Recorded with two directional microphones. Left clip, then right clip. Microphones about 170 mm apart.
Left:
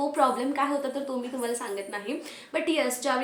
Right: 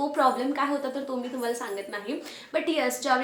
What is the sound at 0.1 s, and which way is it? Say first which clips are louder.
A woman's voice: right 1 dB; centre (ahead or behind).